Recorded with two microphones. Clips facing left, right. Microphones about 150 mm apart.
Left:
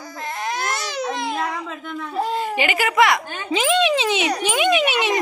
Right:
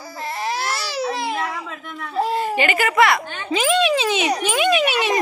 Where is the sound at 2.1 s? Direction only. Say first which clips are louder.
Right 3 dB; 5° right (ahead or behind).